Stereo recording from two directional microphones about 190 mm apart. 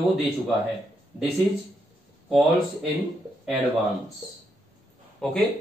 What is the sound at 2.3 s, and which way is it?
Speech, centre (ahead or behind).